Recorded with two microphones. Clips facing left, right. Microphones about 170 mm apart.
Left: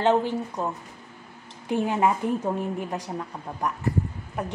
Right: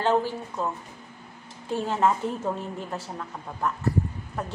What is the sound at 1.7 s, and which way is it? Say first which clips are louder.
A woman's voice: left 1 dB; 15° left (ahead or behind).